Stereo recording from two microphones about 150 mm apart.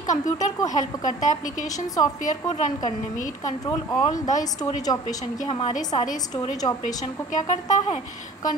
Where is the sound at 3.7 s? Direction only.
25° left (ahead or behind).